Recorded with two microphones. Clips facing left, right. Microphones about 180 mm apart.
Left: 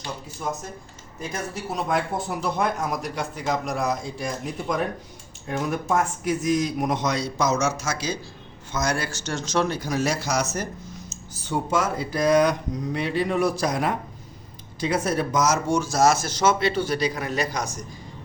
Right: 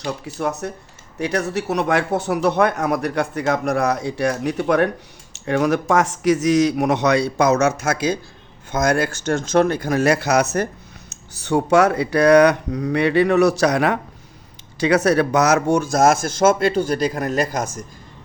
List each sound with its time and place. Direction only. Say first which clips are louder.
0.0 s speech: right 7 dB; 70° right (ahead or behind)
5.3 s speech: right 9 dB; 80° right; by 17.8 s 50° right (ahead or behind)